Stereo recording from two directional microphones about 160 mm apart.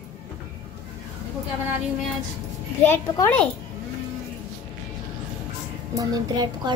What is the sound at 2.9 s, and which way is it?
Speech, 15° left (ahead or behind).